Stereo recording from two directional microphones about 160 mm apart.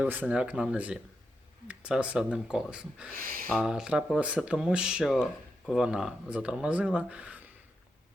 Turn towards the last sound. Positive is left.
turn(degrees=-10)  # may be behind; listen again after turning